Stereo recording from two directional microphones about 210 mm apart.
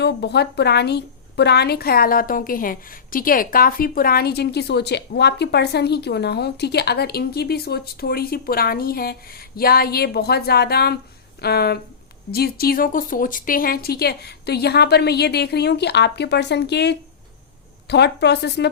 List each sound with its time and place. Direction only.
0.0 s a woman's voice: 55° left (ahead or behind)